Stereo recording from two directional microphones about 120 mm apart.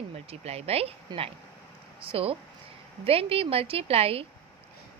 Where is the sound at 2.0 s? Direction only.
50° right (ahead or behind).